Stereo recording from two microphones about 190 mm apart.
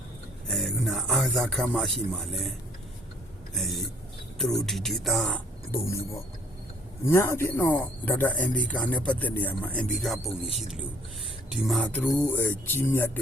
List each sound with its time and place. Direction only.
0.4 s a man's voice: centre (ahead or behind)
3.5 s speech: centre (ahead or behind)
7.1 s speech: 15° left (ahead or behind)
10.4 s speech: 30° left (ahead or behind)
11.5 s speech: centre (ahead or behind)